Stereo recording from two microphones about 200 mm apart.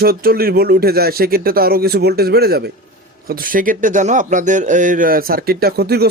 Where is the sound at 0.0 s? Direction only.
50° right (ahead or behind).